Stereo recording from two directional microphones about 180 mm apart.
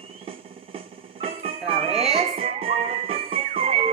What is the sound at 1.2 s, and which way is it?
Music, 30° right (ahead or behind).